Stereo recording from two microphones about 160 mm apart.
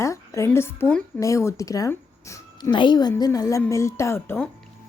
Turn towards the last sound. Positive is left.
turn(degrees=15)  # may be behind; listen again after turning